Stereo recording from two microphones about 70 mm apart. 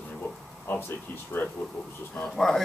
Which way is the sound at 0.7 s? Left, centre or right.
Left.